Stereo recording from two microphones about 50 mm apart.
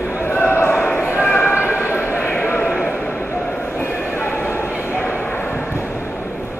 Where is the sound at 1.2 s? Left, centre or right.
Left.